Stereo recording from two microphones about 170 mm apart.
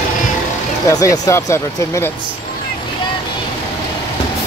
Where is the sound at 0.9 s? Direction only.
20° left (ahead or behind).